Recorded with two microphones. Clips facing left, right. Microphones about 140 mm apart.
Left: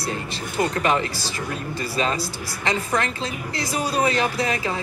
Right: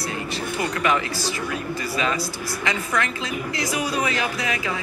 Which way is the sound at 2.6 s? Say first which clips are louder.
Left 2 dB; 30° left (ahead or behind).